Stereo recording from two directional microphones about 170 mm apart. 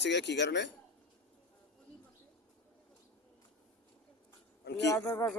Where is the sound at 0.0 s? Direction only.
90° left.